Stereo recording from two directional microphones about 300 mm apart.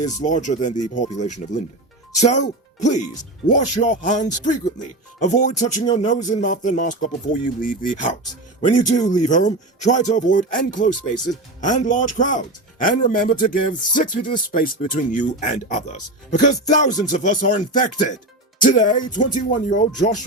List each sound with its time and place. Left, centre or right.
0.0 s speech: left
9.2 s speech: left